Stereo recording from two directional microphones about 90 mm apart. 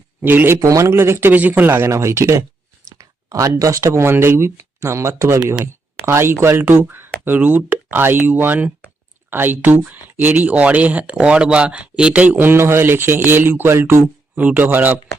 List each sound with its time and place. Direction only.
0.2 s speech: 25° right (ahead or behind)
0.6 s speech: 40° right (ahead or behind)
14.3 s speech: 20° right (ahead or behind)